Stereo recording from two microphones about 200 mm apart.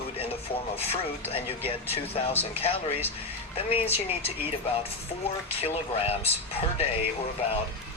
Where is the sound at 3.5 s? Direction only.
30° left (ahead or behind).